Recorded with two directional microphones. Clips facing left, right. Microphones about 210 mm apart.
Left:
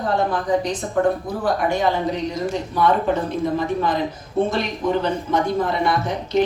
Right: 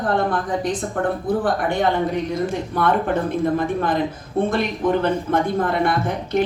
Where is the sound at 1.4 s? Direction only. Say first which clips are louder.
Left 4 dB; 55° right (ahead or behind).